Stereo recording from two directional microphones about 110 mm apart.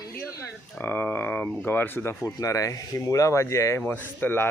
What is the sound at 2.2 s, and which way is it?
Speech, 30° left (ahead or behind).